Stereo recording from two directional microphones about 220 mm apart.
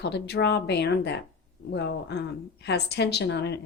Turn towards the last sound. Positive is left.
turn(degrees=50)  # may be behind; listen again after turning